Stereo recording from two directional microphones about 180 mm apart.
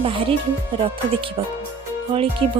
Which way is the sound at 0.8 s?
30° right (ahead or behind).